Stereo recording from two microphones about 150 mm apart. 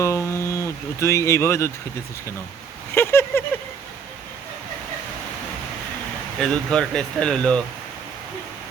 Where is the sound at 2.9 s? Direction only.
15° left (ahead or behind).